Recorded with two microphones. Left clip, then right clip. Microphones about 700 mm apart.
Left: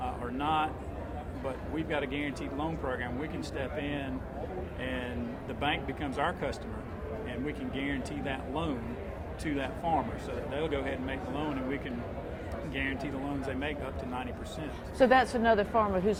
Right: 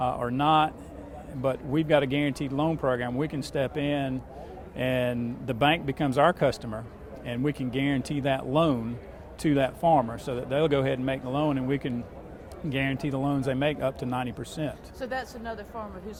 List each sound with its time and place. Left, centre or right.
0.0 s speech: right
14.9 s a woman's voice: left